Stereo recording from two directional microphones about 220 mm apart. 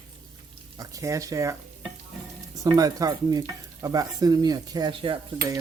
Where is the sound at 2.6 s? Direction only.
15° right (ahead or behind).